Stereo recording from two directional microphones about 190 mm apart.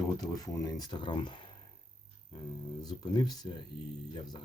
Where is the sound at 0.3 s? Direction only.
20° left (ahead or behind).